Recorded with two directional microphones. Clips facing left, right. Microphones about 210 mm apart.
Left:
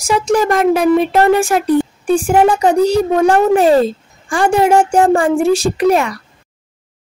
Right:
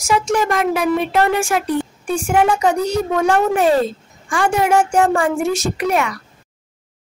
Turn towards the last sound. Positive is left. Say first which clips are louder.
# left 6 dB
turn(degrees=35)  # may be behind; listen again after turning